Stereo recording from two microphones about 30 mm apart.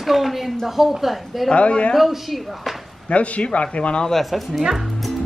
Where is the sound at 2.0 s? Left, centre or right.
Centre.